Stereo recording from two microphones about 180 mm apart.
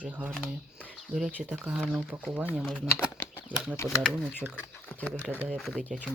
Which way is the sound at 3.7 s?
15° left (ahead or behind).